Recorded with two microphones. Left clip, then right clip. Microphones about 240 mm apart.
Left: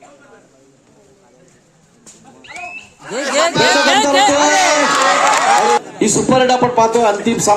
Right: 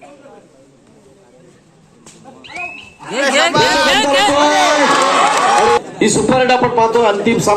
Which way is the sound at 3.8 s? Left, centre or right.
Left.